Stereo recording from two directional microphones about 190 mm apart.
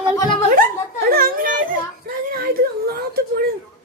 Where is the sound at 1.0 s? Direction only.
50° right (ahead or behind).